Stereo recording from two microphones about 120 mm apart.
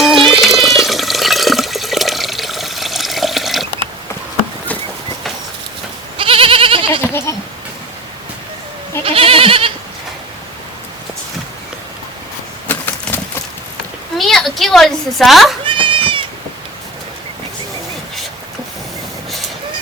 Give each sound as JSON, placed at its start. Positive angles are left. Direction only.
{"t": 0.0, "sound": "water", "side_deg": 0}
{"t": 6.1, "sound": "goat", "side_deg": -50}
{"t": 9.0, "sound": "goat", "side_deg": -50}
{"t": 12.6, "sound": "a sound", "side_deg": 15}
{"t": 14.2, "sound": "a sound", "side_deg": 0}
{"t": 15.6, "sound": "cat", "side_deg": -45}